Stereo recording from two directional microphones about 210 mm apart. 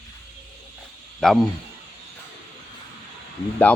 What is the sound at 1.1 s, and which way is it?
Speech, centre (ahead or behind).